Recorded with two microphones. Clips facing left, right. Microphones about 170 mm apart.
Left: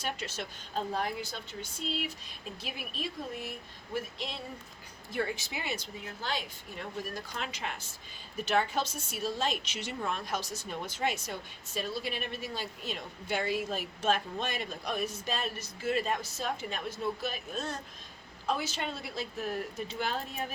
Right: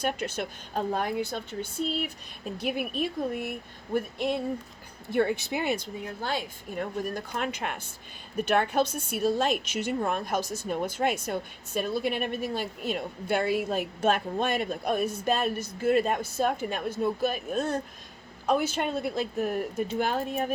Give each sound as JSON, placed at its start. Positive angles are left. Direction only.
{"t": 0.0, "sound": "a woman's voice", "side_deg": -55}